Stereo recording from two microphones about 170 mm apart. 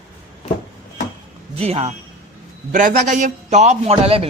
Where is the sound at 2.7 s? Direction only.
50° right (ahead or behind); by 4.2 s 35° right (ahead or behind).